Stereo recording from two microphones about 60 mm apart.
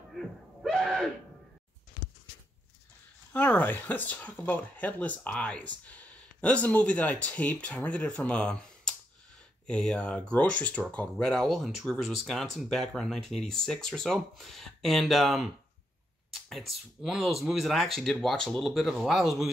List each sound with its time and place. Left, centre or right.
0.1 s a sound: centre
3.3 s speech: left
11.1 s speech: centre
16.4 s speech: centre